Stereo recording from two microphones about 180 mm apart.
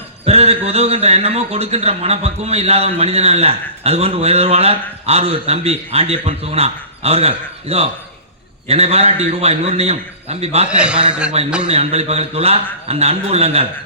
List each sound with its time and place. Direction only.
0.3 s a man's voice: 35° right (ahead or behind)
10.7 s a man's voice: 5° right (ahead or behind)
11.4 s a man's voice: 35° right (ahead or behind)